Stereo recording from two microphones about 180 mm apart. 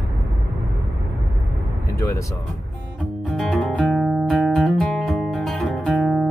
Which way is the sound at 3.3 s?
5° left (ahead or behind).